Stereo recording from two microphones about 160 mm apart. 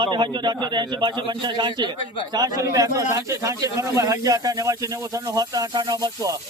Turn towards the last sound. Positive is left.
turn(degrees=-25)  # may be behind; listen again after turning